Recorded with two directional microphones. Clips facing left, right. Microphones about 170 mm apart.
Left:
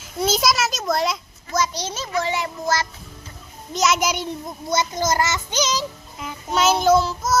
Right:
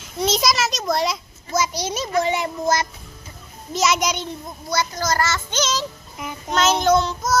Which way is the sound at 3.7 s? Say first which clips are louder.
Even; centre (ahead or behind).